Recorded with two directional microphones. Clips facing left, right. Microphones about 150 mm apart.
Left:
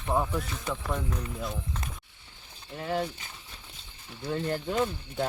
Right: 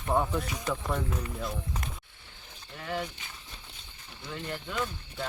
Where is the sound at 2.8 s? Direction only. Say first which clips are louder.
Left 4 dB; 25° left (ahead or behind).